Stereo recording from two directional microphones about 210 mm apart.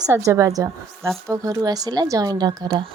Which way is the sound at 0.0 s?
15° right (ahead or behind).